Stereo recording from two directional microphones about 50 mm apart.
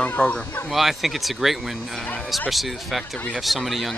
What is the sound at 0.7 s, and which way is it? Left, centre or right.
Speech, centre.